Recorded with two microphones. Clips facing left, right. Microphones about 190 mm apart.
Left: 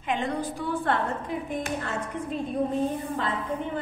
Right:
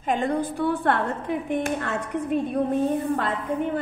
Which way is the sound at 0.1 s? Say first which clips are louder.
Right 4 dB; 50° right (ahead or behind).